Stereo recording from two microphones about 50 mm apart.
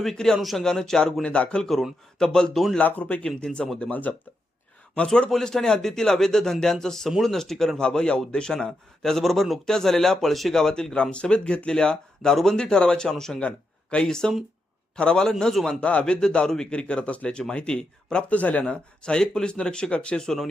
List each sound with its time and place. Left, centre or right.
0.0 s a man's voice: centre
0.6 s a man's voice: centre
2.7 s speech: left
3.2 s a man's voice: centre
3.8 s speech: left
5.0 s a man's voice: centre
7.8 s a man's voice: centre
15.8 s speech: left